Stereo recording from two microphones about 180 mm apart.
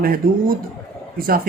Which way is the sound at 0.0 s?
50° right (ahead or behind).